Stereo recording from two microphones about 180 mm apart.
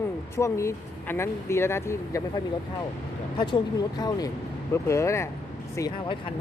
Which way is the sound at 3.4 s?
25° left (ahead or behind).